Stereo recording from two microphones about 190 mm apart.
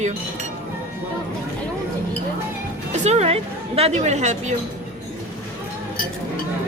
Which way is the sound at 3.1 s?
35° right (ahead or behind).